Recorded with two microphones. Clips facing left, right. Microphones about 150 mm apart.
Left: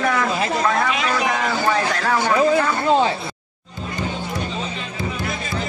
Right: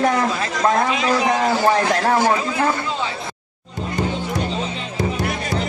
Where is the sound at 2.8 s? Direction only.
50° left (ahead or behind).